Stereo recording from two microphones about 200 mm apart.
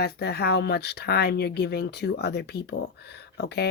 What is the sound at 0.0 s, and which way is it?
Speech, 55° left (ahead or behind).